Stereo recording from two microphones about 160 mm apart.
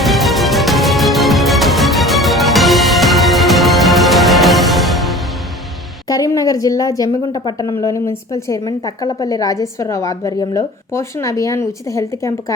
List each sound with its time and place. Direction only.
0.0 s music: centre (ahead or behind)
6.1 s speech: 20° left (ahead or behind)